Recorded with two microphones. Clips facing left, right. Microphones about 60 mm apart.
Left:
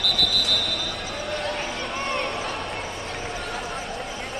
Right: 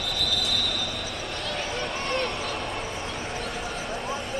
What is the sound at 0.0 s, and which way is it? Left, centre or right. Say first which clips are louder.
Train: left 3 dB; left.